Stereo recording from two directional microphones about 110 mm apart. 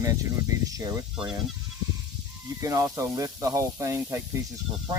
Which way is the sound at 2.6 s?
25° right (ahead or behind).